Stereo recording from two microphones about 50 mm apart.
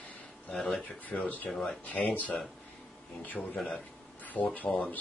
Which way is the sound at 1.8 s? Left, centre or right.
Left.